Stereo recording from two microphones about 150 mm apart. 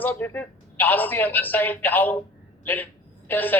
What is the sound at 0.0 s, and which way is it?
A man's voice, 10° left (ahead or behind).